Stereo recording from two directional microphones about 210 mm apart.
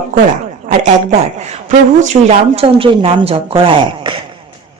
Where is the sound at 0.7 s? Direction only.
35° right (ahead or behind).